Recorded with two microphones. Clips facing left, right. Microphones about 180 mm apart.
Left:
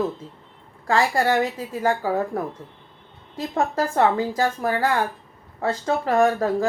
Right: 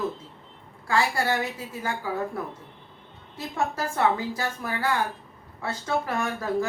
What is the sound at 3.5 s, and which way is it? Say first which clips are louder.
Speech: left 6 dB; 50° left (ahead or behind).